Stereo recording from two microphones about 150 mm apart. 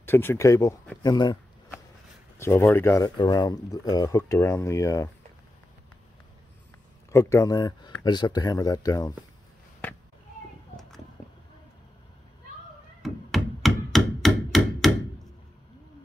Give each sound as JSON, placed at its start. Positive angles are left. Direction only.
{"t": 0.0, "sound": "speech", "side_deg": 15}
{"t": 2.3, "sound": "speech", "side_deg": 20}
{"t": 7.1, "sound": "speech", "side_deg": 20}
{"t": 13.0, "sound": "a sound", "side_deg": 0}